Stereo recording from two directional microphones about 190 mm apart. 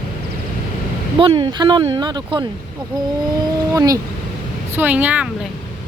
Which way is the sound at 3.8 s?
20° right (ahead or behind).